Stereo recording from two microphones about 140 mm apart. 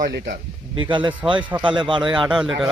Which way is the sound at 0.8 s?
35° right (ahead or behind).